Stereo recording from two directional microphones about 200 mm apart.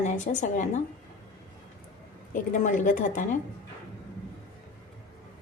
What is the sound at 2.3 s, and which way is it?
Speech, 40° left (ahead or behind).